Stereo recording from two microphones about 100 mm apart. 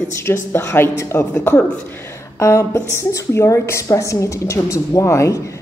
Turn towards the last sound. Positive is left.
turn(degrees=30)  # may be behind; listen again after turning